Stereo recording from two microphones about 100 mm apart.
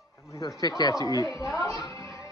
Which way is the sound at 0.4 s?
35° left (ahead or behind).